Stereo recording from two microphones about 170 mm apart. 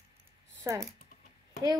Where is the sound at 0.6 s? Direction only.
15° right (ahead or behind).